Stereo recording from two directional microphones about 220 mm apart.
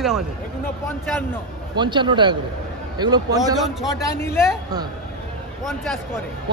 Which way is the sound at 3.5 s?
Centre (ahead or behind).